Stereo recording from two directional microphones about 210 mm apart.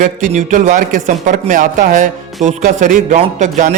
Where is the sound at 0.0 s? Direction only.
40° right (ahead or behind).